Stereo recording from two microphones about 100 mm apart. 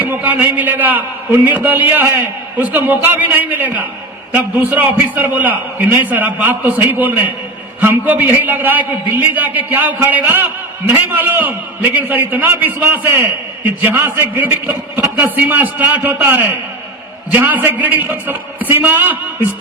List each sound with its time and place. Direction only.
0.1 s a man's voice: 20° right (ahead or behind)